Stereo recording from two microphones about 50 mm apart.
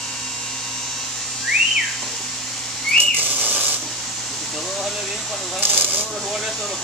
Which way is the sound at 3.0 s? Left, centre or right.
Right.